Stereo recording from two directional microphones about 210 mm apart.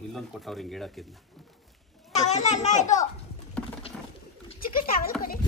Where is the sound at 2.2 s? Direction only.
35° left (ahead or behind).